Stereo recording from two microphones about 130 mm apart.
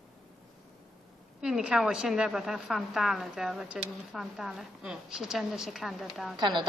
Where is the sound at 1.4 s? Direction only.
5° right (ahead or behind).